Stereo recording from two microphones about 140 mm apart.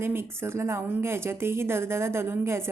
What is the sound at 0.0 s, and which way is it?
Speech, 15° right (ahead or behind).